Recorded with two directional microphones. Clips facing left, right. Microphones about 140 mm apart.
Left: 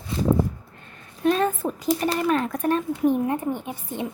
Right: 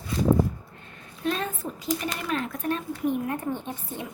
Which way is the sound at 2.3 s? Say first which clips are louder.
Left 6 dB; 45° left (ahead or behind).